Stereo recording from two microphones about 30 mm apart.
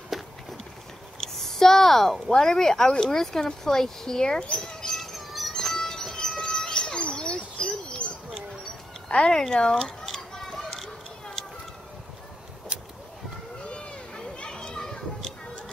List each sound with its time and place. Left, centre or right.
0.1 s a sound: centre
1.2 s a sound: centre
2.2 s speech: centre
4.2 s speech: left
4.9 s bird: centre
5.5 s bird: centre; by 8.1 s left
9.1 s speech: left
13.7 s children playing: left